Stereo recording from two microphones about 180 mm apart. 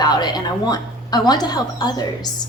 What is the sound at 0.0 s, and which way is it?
A woman's voice, 25° left (ahead or behind).